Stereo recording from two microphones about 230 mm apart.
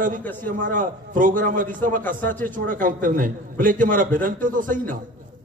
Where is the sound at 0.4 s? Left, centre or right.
Right.